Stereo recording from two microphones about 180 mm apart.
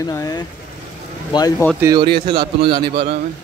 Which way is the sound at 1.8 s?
20° right (ahead or behind).